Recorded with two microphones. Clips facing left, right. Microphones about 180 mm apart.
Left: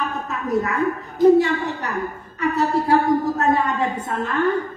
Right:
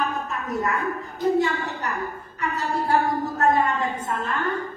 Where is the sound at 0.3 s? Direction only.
70° left (ahead or behind).